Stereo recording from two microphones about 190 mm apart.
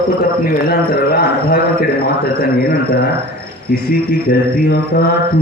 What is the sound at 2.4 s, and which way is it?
A man's voice, 50° left (ahead or behind).